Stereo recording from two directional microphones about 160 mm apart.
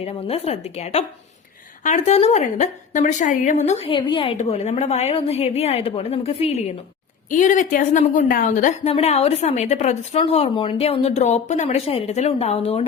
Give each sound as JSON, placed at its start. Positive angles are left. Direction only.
{"t": 0.0, "sound": "a woman's voice", "side_deg": 40}
{"t": 4.4, "sound": "a woman's voice", "side_deg": 45}
{"t": 7.3, "sound": "a woman's voice", "side_deg": 55}